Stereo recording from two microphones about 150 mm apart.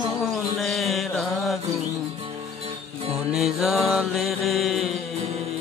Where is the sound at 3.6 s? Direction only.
Centre (ahead or behind).